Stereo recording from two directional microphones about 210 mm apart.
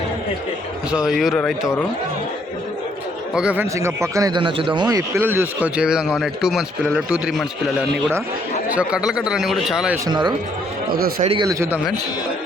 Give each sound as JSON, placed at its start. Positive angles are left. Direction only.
{"t": 0.9, "sound": "a man's voice", "side_deg": -5}
{"t": 3.3, "sound": "a man's voice", "side_deg": -5}
{"t": 10.1, "sound": "a man's voice", "side_deg": -20}